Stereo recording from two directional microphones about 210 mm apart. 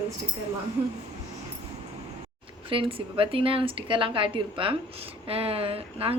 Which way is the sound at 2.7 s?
25° right (ahead or behind).